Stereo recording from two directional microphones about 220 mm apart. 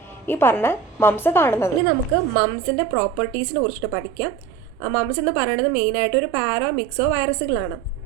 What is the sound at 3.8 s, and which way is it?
A woman's voice, centre (ahead or behind).